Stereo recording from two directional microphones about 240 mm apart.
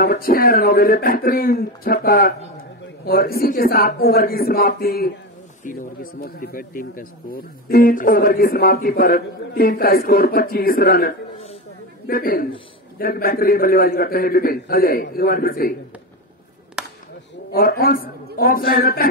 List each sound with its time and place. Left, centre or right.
0.0 s speech: left
17.5 s speech: left